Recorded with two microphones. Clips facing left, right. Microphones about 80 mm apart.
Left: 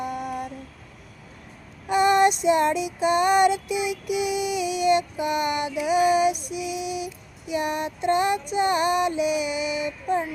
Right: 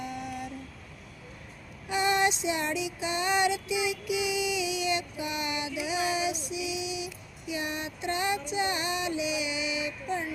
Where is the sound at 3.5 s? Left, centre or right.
Left.